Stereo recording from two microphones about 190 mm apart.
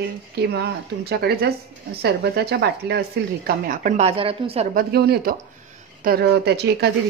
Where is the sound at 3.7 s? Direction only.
45° right (ahead or behind).